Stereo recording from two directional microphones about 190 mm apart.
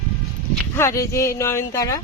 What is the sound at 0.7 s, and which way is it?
Speech, 15° left (ahead or behind).